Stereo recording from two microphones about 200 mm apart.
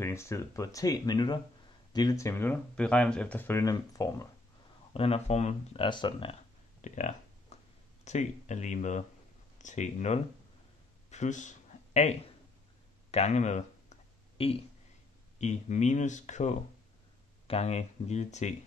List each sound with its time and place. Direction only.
0.0 s speech: 15° left (ahead or behind)
4.9 s speech: 30° left (ahead or behind)
6.8 s a sound: 35° left (ahead or behind)
8.0 s speech: 35° left (ahead or behind)
11.1 s a sound: 35° left (ahead or behind)
13.1 s speech: 35° left (ahead or behind)